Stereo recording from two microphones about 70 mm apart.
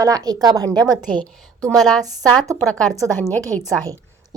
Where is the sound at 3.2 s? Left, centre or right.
Left.